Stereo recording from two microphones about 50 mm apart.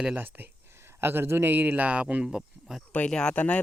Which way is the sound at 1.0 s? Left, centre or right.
Right.